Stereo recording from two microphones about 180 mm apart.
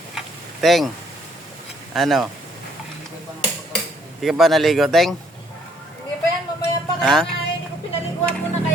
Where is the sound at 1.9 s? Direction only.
Centre (ahead or behind).